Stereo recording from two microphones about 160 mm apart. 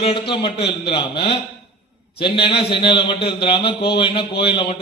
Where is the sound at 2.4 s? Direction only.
35° left (ahead or behind).